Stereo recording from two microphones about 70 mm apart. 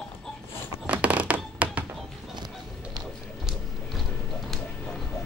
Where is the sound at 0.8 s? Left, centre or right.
Right.